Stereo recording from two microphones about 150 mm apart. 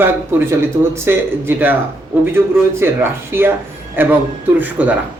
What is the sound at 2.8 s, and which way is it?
A man's voice, 15° right (ahead or behind).